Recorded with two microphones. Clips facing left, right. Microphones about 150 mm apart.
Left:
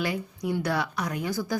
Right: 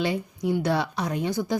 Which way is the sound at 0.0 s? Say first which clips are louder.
Right 3 dB; 25° right (ahead or behind).